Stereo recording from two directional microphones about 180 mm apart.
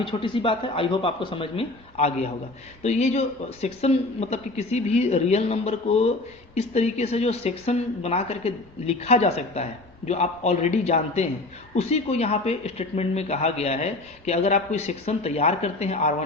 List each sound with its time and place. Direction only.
0.0 s speech: 30° left (ahead or behind)